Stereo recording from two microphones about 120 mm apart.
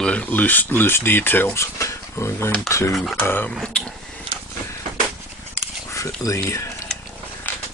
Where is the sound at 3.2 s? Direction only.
15° left (ahead or behind).